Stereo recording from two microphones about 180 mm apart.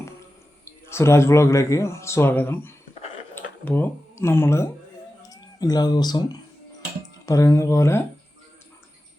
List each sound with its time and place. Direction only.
0.6 s speech: 15° left (ahead or behind)